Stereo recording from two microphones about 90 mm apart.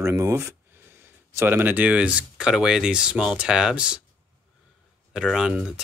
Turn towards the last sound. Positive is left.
turn(degrees=-5)  # may be behind; listen again after turning